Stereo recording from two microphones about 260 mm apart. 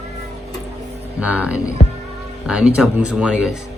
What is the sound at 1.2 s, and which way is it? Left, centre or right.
Speech, centre.